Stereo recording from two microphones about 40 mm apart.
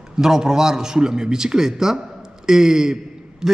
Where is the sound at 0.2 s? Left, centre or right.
Centre.